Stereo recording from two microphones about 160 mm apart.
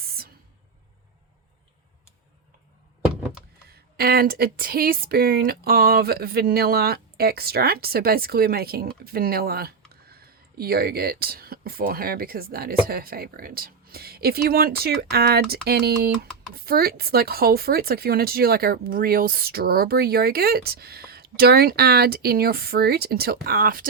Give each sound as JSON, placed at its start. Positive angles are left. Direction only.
{"t": 0.0, "sound": "a sound", "side_deg": -70}
{"t": 3.7, "sound": "speech", "side_deg": -70}
{"t": 16.6, "sound": "speech", "side_deg": -70}